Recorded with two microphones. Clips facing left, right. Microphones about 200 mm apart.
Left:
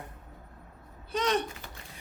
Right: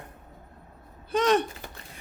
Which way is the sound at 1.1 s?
50° right (ahead or behind).